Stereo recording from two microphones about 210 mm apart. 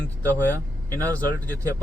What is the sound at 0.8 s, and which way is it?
Speech, 15° right (ahead or behind).